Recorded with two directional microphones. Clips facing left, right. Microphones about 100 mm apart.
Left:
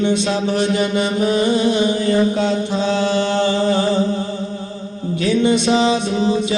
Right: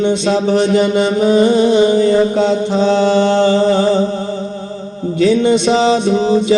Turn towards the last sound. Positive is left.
turn(degrees=-25)  # may be behind; listen again after turning